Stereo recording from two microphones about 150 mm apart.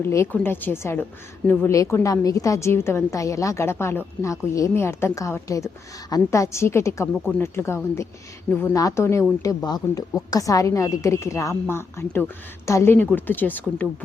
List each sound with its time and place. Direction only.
0.0 s a woman's voice: 20° left (ahead or behind)